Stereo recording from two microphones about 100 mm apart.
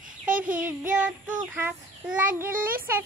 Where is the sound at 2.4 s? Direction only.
20° right (ahead or behind).